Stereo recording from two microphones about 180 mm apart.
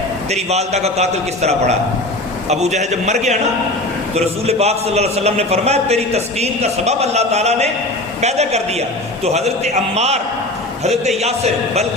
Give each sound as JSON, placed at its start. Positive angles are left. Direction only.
{"t": 0.3, "sound": "a man's voice", "side_deg": -40}
{"t": 11.2, "sound": "a man's voice", "side_deg": -35}